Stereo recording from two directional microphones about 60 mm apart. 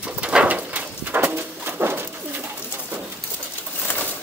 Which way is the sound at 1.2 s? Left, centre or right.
Right.